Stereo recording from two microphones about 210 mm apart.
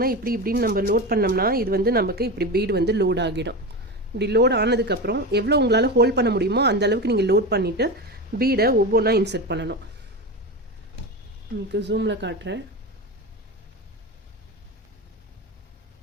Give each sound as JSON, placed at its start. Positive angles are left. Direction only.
{"t": 0.0, "sound": "speech", "side_deg": -45}
{"t": 11.7, "sound": "speech", "side_deg": -55}